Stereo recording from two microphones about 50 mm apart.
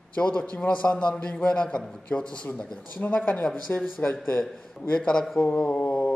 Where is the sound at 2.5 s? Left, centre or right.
Left.